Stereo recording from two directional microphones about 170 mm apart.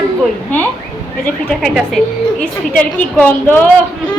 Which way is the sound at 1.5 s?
Centre (ahead or behind).